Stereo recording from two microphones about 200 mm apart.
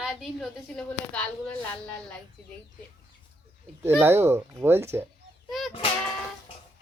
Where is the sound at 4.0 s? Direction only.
10° right (ahead or behind).